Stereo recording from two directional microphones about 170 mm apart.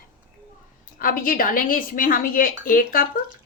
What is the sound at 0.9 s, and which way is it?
Speech, 55° left (ahead or behind).